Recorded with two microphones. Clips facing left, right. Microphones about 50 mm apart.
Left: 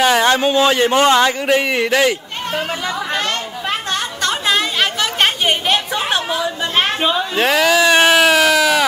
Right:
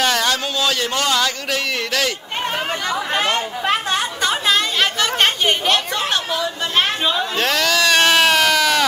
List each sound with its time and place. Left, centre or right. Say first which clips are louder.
0.0 s a man's voice: left 6 dB; left
3.2 s chatter: right 2 dB; centre